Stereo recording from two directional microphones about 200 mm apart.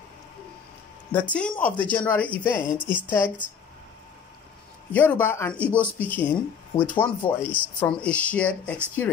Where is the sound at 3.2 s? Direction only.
40° left (ahead or behind).